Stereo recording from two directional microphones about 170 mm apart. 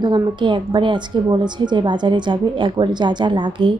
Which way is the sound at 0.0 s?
25° right (ahead or behind).